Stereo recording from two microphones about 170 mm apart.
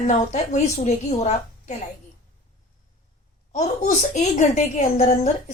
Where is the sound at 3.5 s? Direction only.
45° left (ahead or behind).